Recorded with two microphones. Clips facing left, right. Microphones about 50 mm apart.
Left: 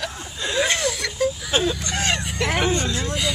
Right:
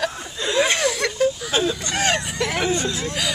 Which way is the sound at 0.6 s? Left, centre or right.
Right.